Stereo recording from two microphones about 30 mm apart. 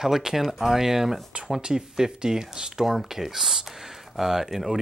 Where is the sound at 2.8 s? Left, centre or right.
Centre.